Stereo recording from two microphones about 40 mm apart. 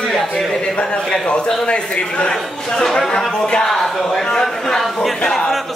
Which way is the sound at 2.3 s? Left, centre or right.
Centre.